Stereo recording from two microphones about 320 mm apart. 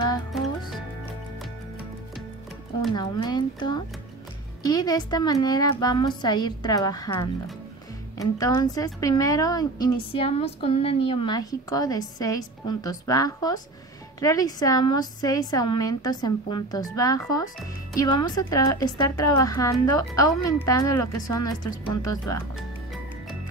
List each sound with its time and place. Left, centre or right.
2.9 s a woman's voice: centre